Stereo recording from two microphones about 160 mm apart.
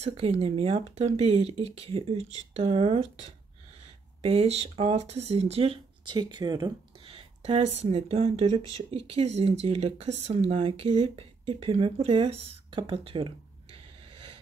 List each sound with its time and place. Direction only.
0.0 s speech: 40° right (ahead or behind)
6.1 s speech: 25° right (ahead or behind)